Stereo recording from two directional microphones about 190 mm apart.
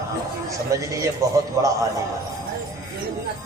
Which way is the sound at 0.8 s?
15° right (ahead or behind).